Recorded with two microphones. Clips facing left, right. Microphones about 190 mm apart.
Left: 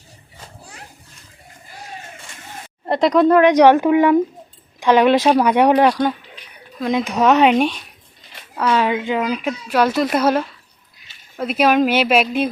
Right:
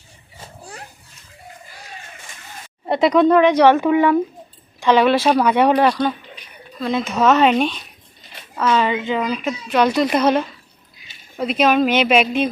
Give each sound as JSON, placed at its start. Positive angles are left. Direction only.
{"t": 2.8, "sound": "a woman's voice", "side_deg": 0}